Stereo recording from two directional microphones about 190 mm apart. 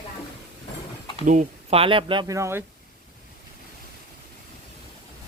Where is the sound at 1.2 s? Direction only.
35° right (ahead or behind); by 2.6 s 15° right (ahead or behind).